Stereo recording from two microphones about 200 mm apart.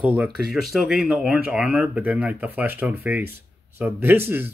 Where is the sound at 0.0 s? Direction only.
5° right (ahead or behind).